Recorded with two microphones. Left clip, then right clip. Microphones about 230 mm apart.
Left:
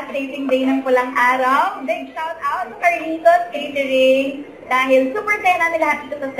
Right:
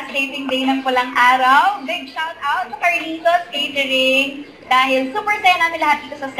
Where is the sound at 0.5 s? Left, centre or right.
Centre.